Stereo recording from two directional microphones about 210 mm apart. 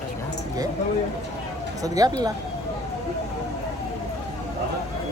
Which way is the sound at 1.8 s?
15° right (ahead or behind).